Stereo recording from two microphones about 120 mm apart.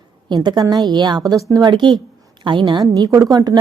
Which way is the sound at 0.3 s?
35° right (ahead or behind).